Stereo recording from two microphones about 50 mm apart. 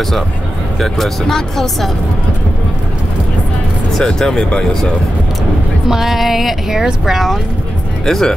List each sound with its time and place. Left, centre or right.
0.7 s speech: centre
3.9 s speech: centre
5.9 s speech: centre
8.0 s speech: centre